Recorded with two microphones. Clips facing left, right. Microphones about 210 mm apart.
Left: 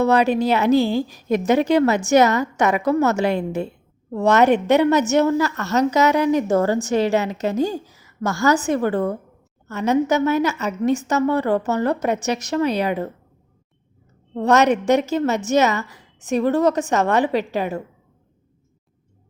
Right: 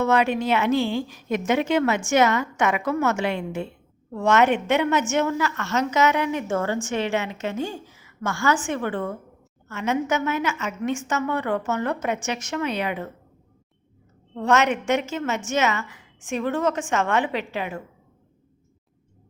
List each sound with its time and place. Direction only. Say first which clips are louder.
0.0 s a woman's voice: left 4 dB; 35° left (ahead or behind)
14.3 s a woman's voice: left 5 dB; 35° left (ahead or behind)